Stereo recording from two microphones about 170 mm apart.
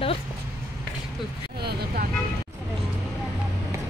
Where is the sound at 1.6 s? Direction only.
70° right (ahead or behind).